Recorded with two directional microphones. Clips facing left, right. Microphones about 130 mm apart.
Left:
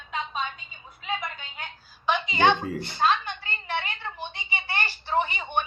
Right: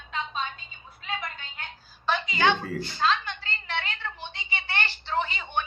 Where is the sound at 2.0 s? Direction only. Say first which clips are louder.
Left 2 dB; 20° left (ahead or behind).